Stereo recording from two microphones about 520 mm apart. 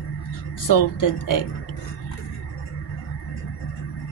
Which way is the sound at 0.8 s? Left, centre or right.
Left.